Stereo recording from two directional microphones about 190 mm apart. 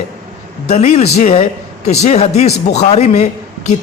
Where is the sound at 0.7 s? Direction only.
35° left (ahead or behind).